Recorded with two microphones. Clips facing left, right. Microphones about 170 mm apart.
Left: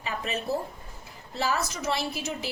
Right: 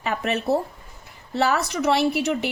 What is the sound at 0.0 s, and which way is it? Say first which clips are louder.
A woman's voice: right 7 dB; 70° right (ahead or behind).